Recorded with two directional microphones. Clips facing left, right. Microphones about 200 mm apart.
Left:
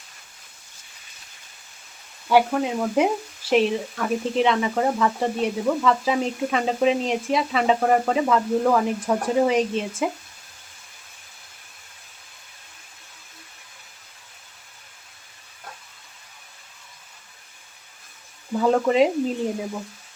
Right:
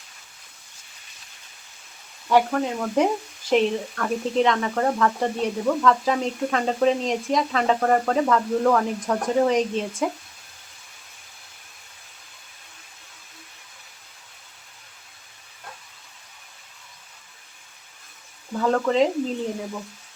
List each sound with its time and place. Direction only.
2.2 s speech: 5° left (ahead or behind)
18.5 s speech: 10° left (ahead or behind)